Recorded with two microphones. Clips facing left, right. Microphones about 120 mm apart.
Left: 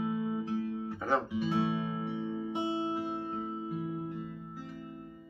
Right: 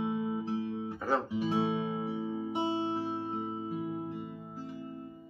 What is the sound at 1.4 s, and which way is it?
Music, 25° right (ahead or behind).